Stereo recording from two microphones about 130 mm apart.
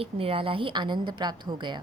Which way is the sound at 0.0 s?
45° right (ahead or behind).